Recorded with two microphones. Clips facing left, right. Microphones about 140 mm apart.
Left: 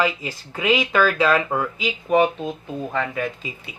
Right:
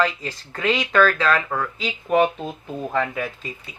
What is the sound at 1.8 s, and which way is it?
Speech, 5° left (ahead or behind).